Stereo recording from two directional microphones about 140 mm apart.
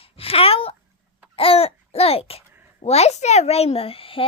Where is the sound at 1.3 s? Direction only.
45° left (ahead or behind).